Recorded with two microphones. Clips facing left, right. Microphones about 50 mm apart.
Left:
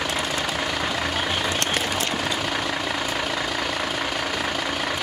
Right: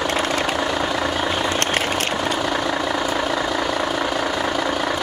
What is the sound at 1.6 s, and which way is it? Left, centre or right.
Vehicle, right.